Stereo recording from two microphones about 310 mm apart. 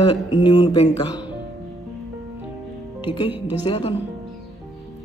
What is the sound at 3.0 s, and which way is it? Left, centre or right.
Speech, centre.